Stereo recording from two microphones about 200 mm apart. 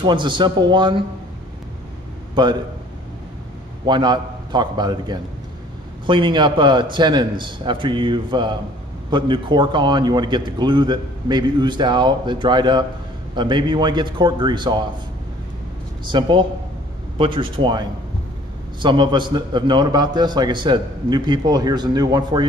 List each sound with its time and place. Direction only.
0.0 s a man's voice: 25° right (ahead or behind)
2.4 s a man's voice: 20° right (ahead or behind)
3.8 s a man's voice: 20° right (ahead or behind)
16.1 s a man's voice: 25° right (ahead or behind)